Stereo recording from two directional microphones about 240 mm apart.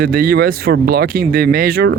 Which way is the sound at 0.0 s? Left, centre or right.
Right.